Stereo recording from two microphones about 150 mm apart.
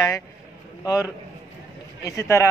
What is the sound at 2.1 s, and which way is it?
Speech, 20° left (ahead or behind).